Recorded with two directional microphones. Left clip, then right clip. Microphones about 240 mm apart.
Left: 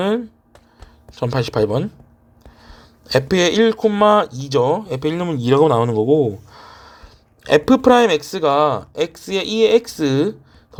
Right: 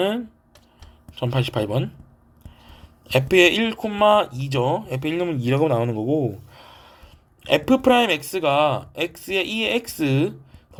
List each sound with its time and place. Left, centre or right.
1.2 s speech: left
3.2 s speech: left